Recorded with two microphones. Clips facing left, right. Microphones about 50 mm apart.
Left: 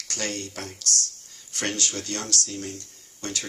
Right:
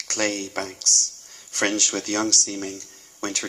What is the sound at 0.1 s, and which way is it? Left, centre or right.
Speech, right.